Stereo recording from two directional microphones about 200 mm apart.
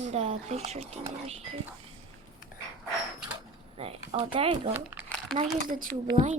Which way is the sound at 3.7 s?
30° right (ahead or behind).